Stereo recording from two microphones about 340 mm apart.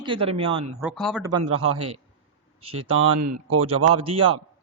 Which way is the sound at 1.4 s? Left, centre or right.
Right.